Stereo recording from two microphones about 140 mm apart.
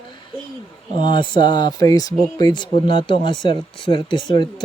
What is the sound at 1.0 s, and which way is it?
Speech, 35° left (ahead or behind).